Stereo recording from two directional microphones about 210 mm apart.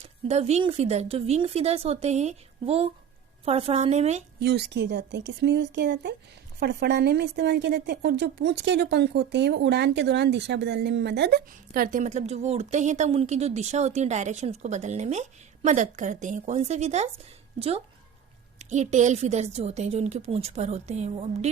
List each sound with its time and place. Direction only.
0.3 s a woman's voice: 30° right (ahead or behind)
4.4 s a woman's voice: 50° right (ahead or behind); by 21.5 s 30° right (ahead or behind)